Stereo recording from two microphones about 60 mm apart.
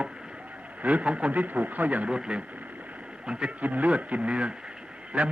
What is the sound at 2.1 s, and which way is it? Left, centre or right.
A man's voice, centre.